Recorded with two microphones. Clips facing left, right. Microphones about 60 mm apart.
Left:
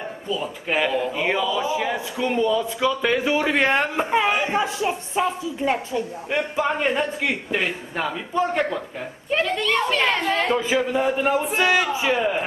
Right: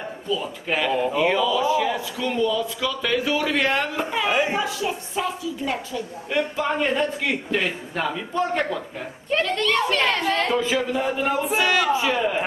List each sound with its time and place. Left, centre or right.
0.3 s a woman's voice: centre; by 6.0 s left
6.3 s a woman's voice: centre